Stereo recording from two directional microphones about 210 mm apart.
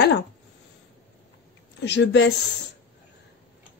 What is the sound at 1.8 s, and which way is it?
Speech, 55° left (ahead or behind).